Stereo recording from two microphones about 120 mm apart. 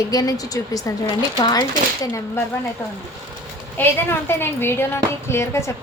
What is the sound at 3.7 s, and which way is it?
A woman's voice, 20° left (ahead or behind).